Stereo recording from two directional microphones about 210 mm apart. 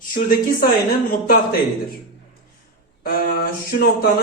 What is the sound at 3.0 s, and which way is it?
A man's voice, 45° left (ahead or behind).